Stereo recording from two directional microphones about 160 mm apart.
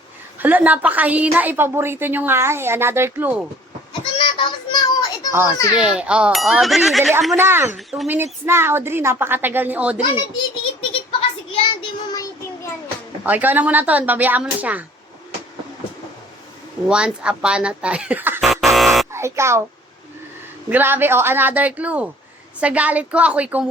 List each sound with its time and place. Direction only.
0.3 s a woman's voice: 10° right (ahead or behind)
4.0 s child singing: 30° left (ahead or behind)
5.7 s speech: 5° right (ahead or behind)
7.3 s a woman's voice: 15° right (ahead or behind)
7.8 s speech: centre (ahead or behind)
8.1 s a woman's voice: 15° right (ahead or behind)
10.0 s a sound: 30° left (ahead or behind)
13.2 s a woman's voice: 10° right (ahead or behind)
16.9 s a woman's voice: 5° right (ahead or behind)
18.3 s buzzer: centre (ahead or behind)
19.1 s a child's voice: 15° right (ahead or behind)
20.7 s a woman's voice: 10° right (ahead or behind)